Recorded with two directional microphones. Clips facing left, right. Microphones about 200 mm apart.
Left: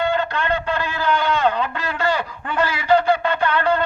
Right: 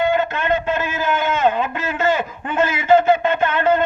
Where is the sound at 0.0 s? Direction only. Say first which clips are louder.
Right 2 dB; 20° right (ahead or behind).